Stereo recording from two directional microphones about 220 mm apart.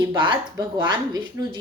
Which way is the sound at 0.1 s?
20° right (ahead or behind).